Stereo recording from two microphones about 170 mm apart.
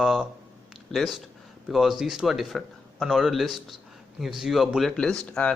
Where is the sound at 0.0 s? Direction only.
Centre (ahead or behind).